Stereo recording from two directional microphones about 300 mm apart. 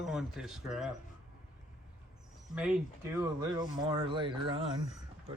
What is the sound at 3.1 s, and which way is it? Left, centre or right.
Speech, centre.